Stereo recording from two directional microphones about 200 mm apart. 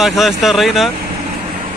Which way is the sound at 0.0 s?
Centre (ahead or behind).